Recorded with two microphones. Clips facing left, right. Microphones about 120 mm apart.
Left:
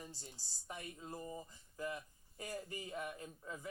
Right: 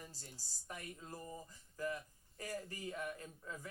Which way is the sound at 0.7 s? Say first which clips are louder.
Left 1 dB; 20° left (ahead or behind).